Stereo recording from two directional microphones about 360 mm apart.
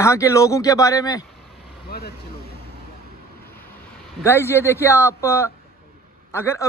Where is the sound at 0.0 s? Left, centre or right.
Centre.